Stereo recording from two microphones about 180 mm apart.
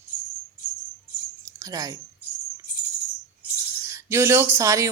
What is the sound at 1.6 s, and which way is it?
Speech, 20° right (ahead or behind).